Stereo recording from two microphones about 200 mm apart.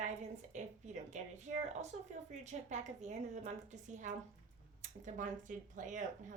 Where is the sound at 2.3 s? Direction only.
35° right (ahead or behind).